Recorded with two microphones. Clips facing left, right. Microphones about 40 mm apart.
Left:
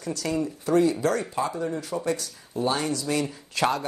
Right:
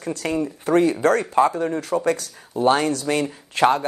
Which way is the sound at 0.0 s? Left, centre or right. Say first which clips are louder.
Right 3 dB; right.